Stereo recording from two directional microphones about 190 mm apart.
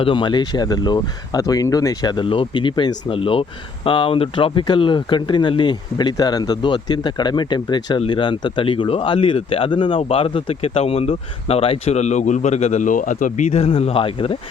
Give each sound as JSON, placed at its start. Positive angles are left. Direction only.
{"t": 0.0, "sound": "speech", "side_deg": 25}